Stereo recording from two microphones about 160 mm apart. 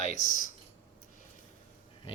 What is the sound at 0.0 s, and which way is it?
Speech, 50° left (ahead or behind).